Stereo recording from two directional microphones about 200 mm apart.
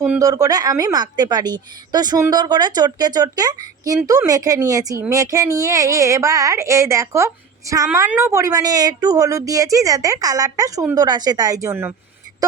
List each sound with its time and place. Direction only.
0.2 s a woman's voice: 15° right (ahead or behind)